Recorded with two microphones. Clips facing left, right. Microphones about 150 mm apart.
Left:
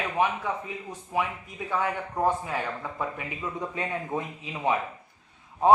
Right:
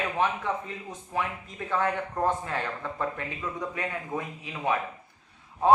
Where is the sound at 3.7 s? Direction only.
25° left (ahead or behind).